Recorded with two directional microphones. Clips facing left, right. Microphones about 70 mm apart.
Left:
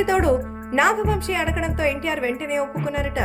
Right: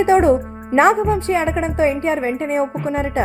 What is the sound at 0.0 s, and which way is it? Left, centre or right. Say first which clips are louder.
A woman's voice: right 6 dB; right.